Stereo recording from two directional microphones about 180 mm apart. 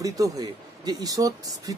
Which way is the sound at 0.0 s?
20° right (ahead or behind).